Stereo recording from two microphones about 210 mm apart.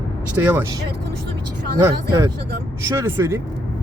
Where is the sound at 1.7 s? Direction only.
15° right (ahead or behind).